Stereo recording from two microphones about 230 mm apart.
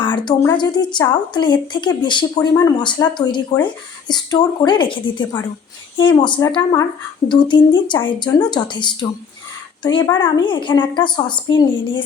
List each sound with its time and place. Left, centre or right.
0.0 s speech: centre